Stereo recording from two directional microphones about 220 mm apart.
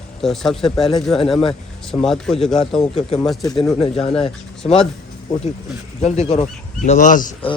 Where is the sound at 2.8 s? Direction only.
25° left (ahead or behind).